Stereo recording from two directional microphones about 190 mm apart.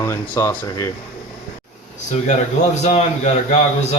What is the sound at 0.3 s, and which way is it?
Speech, 15° left (ahead or behind).